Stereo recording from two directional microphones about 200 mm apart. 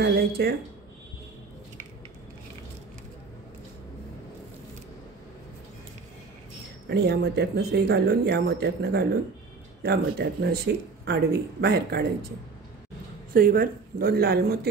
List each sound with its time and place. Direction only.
0.0 s speech: 55° right (ahead or behind)
6.9 s speech: 55° right (ahead or behind)
13.3 s speech: 45° right (ahead or behind)